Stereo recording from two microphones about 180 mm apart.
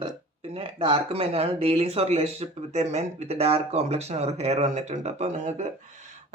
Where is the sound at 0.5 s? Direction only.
30° right (ahead or behind).